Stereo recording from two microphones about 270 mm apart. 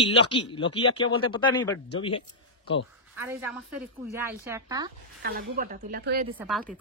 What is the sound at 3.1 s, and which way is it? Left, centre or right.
A woman's voice, centre.